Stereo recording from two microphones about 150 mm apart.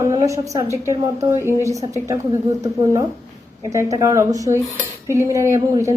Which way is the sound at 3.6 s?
20° right (ahead or behind).